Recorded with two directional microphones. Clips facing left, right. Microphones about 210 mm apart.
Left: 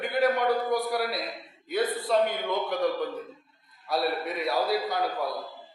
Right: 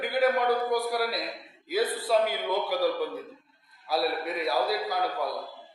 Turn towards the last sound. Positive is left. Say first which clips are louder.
# even
turn(degrees=0)  # may be behind; listen again after turning